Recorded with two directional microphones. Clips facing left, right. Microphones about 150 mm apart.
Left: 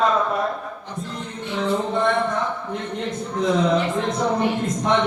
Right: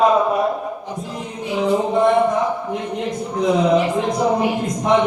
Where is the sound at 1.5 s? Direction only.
5° right (ahead or behind); by 2.5 s 20° right (ahead or behind).